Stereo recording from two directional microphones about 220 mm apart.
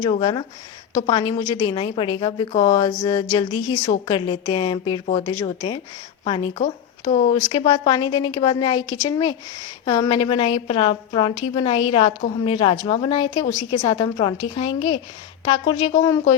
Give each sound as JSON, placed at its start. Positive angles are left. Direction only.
{"t": 0.0, "sound": "speech", "side_deg": 20}